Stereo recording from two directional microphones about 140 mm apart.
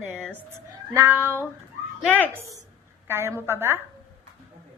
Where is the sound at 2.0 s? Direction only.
10° left (ahead or behind).